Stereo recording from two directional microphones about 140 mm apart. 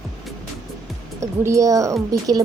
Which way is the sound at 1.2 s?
20° right (ahead or behind).